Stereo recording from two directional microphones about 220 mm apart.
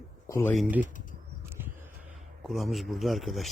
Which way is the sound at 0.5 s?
5° right (ahead or behind).